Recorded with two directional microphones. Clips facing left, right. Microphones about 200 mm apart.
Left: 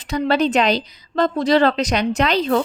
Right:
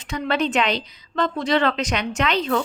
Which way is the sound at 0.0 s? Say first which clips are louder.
Left 5 dB; 35° left (ahead or behind).